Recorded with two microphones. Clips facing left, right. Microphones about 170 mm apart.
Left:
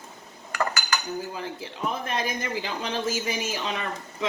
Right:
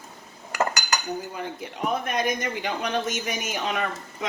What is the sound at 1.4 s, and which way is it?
A man's voice, 30° left (ahead or behind).